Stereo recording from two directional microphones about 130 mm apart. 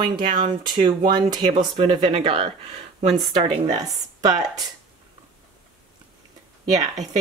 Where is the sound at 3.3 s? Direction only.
30° right (ahead or behind).